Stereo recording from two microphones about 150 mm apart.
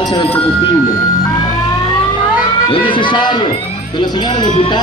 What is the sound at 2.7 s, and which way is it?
Speech, 35° left (ahead or behind).